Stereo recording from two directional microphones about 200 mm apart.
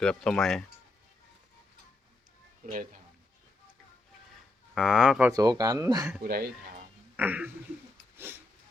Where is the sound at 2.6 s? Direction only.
40° right (ahead or behind).